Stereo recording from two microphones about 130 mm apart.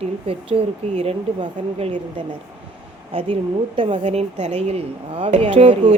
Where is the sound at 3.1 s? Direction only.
45° right (ahead or behind).